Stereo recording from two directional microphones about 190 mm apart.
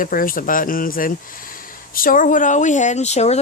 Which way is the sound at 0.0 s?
45° left (ahead or behind).